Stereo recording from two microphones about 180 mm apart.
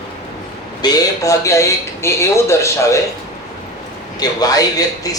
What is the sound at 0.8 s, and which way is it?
Speech, 20° left (ahead or behind).